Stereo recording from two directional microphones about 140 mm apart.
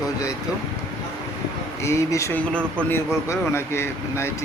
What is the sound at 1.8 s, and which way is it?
Speech, 20° left (ahead or behind).